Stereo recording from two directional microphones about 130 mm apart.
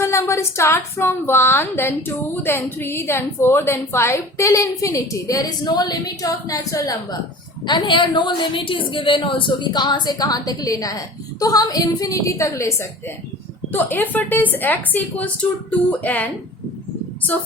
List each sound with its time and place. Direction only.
0.0 s a woman's voice: 20° left (ahead or behind)